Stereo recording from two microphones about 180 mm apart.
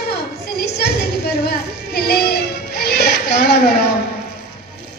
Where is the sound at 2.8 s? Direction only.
65° left (ahead or behind).